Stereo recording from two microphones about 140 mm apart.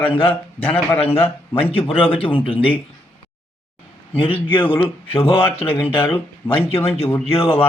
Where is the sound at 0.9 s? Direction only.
45° left (ahead or behind).